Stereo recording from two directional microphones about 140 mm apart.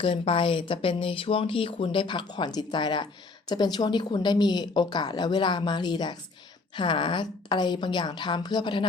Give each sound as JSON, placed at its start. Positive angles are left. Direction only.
{"t": 0.0, "sound": "speech", "side_deg": 40}